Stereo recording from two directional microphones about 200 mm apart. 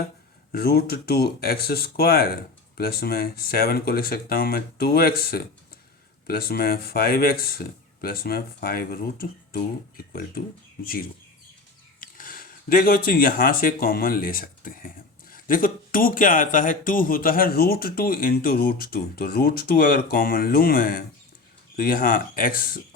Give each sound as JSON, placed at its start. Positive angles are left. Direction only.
{"t": 0.5, "sound": "speech", "side_deg": 50}
{"t": 11.9, "sound": "speech", "side_deg": 45}